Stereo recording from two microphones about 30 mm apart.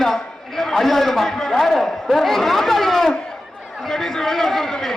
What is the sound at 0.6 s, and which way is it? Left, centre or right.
Speech, centre.